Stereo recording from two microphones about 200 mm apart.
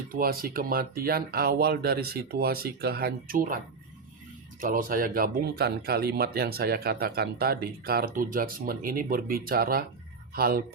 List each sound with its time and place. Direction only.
0.1 s speech: 45° right (ahead or behind)
4.6 s speech: 45° right (ahead or behind)